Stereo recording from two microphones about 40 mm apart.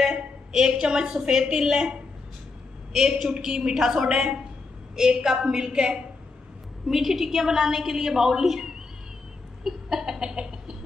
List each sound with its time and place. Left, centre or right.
0.0 s a woman's voice: centre
6.9 s a woman's voice: centre
9.6 s chicken: centre